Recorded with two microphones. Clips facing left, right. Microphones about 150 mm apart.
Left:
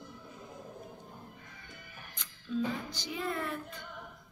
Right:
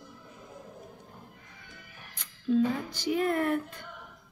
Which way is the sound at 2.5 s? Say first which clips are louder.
Right 8 dB; 55° right (ahead or behind).